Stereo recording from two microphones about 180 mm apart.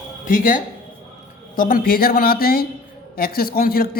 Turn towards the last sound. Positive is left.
turn(degrees=55)  # may be behind; listen again after turning